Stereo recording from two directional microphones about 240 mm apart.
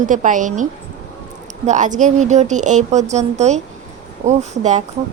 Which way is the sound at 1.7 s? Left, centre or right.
Right.